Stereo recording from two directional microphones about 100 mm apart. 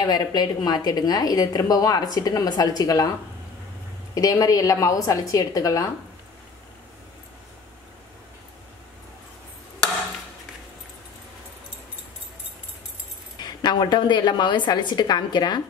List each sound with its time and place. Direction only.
0.0 s a woman's voice: 45° left (ahead or behind)
13.4 s a woman's voice: 45° left (ahead or behind)